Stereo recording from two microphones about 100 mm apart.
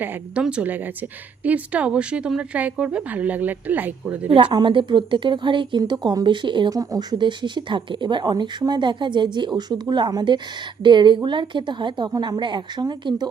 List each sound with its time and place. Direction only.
0.4 s speech: 15° right (ahead or behind)
4.3 s speech: 65° right (ahead or behind)
4.5 s speech: 55° right (ahead or behind)
6.7 s speech: 40° right (ahead or behind)
12.4 s speech: 50° right (ahead or behind)